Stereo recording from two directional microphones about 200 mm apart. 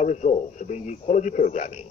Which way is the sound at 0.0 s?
35° left (ahead or behind).